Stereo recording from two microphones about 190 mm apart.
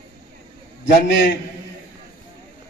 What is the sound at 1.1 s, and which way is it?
Speech, 70° left (ahead or behind).